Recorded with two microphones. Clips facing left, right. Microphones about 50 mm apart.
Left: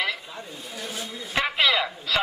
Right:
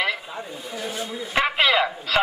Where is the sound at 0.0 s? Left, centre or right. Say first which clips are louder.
Right 3 dB; centre.